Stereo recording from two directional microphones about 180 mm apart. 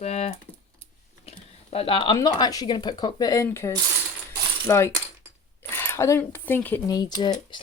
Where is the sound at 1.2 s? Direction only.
35° left (ahead or behind).